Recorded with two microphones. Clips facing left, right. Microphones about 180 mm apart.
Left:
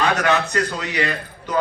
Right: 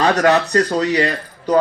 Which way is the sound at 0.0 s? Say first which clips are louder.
Right 5 dB; 35° right (ahead or behind).